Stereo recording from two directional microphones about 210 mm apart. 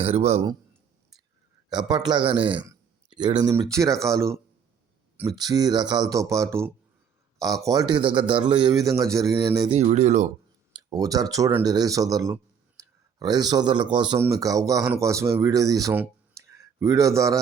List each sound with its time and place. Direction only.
0.0 s a man's voice: 30° right (ahead or behind)
1.7 s a man's voice: 20° right (ahead or behind)
9.7 s speech: 30° right (ahead or behind)
10.8 s a man's voice: 15° right (ahead or behind)